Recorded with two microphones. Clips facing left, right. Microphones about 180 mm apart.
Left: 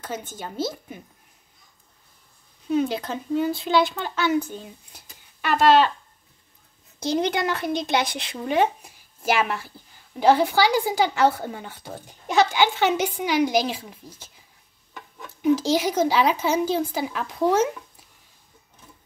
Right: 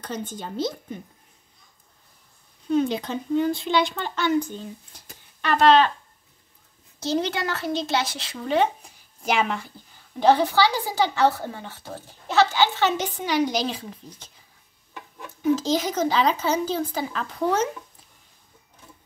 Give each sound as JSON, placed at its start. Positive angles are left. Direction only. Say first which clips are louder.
{"t": 0.0, "sound": "speech", "louder": "right 1 dB", "side_deg": 5}
{"t": 2.7, "sound": "speech", "louder": "right 1 dB", "side_deg": 5}
{"t": 7.0, "sound": "a woman's voice", "louder": "left 2 dB", "side_deg": 15}
{"t": 15.4, "sound": "speech", "louder": "left 2 dB", "side_deg": 10}